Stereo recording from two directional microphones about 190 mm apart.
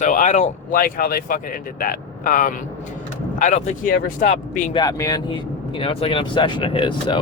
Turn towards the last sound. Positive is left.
turn(degrees=25)  # may be behind; listen again after turning